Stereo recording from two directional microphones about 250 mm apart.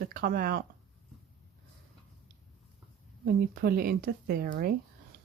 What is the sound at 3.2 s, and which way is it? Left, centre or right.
Speech, right.